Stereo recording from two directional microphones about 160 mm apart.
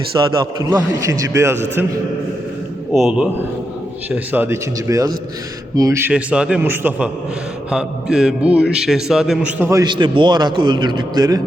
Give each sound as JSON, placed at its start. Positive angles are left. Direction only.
{"t": 0.1, "sound": "a man's voice", "side_deg": -25}
{"t": 2.9, "sound": "a man's voice", "side_deg": -5}
{"t": 6.1, "sound": "a man's voice", "side_deg": -5}
{"t": 9.8, "sound": "a man's voice", "side_deg": -30}